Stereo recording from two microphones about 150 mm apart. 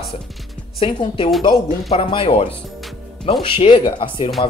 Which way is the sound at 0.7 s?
35° left (ahead or behind).